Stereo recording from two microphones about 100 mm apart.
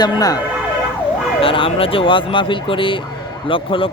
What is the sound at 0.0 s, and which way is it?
Speech, 40° left (ahead or behind).